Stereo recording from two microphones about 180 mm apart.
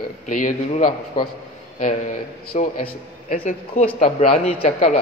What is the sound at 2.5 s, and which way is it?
Speech, 50° left (ahead or behind).